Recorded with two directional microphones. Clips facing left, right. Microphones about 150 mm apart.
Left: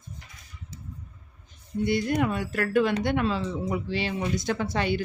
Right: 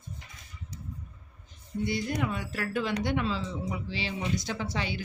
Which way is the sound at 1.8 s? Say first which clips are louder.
Left 6 dB; 60° left (ahead or behind).